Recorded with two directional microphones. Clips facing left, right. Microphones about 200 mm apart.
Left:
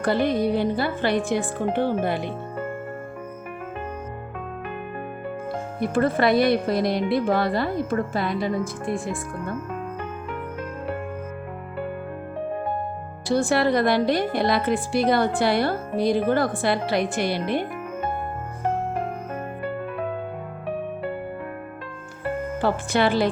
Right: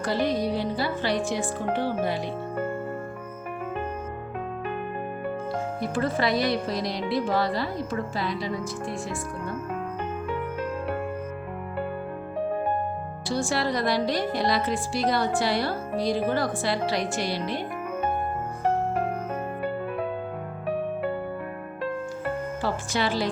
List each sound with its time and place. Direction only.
0.0 s speech: 55° left (ahead or behind)
5.8 s speech: 55° left (ahead or behind)
13.3 s speech: 55° left (ahead or behind)
22.6 s speech: 60° left (ahead or behind)